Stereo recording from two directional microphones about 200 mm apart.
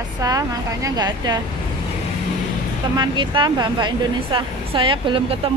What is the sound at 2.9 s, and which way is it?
Speech, 25° right (ahead or behind).